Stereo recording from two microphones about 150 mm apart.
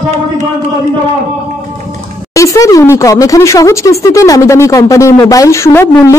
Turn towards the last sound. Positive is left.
turn(degrees=20)  # may be behind; listen again after turning